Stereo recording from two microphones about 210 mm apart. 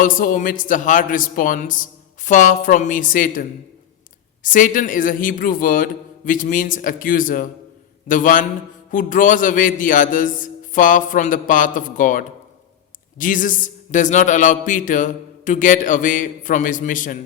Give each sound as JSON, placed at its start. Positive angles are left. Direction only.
{"t": 0.0, "sound": "speech", "side_deg": 40}
{"t": 4.4, "sound": "speech", "side_deg": 40}